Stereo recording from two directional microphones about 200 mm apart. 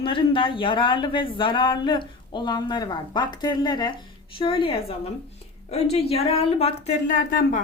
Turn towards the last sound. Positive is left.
turn(degrees=40)  # may be behind; listen again after turning